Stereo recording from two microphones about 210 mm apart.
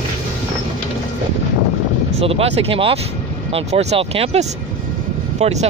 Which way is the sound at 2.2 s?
25° right (ahead or behind).